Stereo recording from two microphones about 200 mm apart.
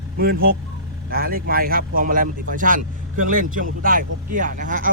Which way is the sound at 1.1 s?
45° right (ahead or behind).